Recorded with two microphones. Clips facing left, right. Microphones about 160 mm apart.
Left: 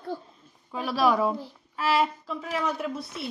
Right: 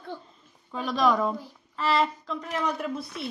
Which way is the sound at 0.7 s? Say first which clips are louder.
Even; 5° left (ahead or behind).